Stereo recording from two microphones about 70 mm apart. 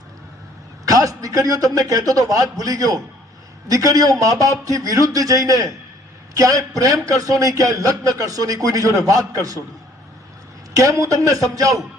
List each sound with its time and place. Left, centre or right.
0.9 s a man's voice: right
10.8 s a man's voice: right